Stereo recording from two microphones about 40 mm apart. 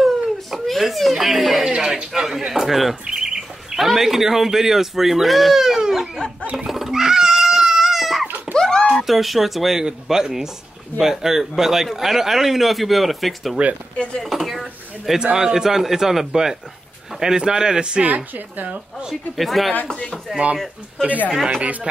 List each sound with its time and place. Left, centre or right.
0.0 s a sound: centre
1.1 s a man's voice: centre
1.6 s a man's voice: centre
2.2 s a man's voice: centre
6.5 s crying: centre
8.5 s a sound: centre
8.9 s a man's voice: centre
13.9 s speech: left
14.3 s speech: centre
15.3 s a man's voice: centre
18.0 s speech: right
19.0 s a man's voice: centre